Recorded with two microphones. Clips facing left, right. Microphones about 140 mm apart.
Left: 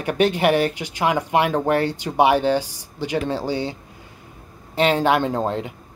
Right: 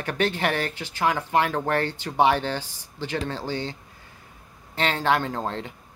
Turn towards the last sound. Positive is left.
turn(degrees=15)  # may be behind; listen again after turning